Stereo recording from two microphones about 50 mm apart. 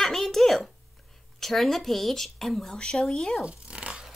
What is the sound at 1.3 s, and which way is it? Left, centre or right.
Speech, centre.